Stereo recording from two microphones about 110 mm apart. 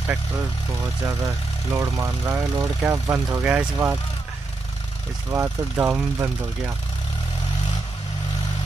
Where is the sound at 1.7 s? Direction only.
20° right (ahead or behind).